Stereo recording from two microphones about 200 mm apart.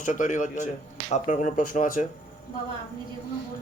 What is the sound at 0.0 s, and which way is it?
Speech, 40° left (ahead or behind).